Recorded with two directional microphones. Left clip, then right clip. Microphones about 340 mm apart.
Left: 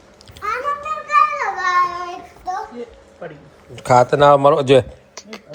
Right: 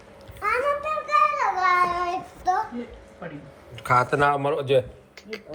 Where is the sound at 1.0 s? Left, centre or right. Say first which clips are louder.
Left 5 dB; centre.